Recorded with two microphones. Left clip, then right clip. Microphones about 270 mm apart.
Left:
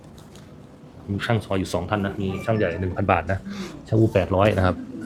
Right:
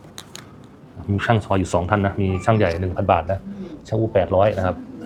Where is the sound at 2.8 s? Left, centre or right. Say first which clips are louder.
Right 3 dB; centre; by 4.8 s left.